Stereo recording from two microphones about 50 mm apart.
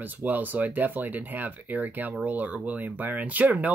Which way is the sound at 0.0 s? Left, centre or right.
Right.